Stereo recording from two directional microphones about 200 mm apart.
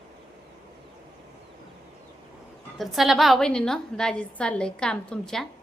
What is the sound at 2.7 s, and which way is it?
A woman's voice, centre (ahead or behind).